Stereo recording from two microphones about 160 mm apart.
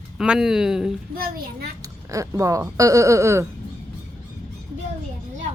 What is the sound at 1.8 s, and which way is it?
Speech, 20° right (ahead or behind).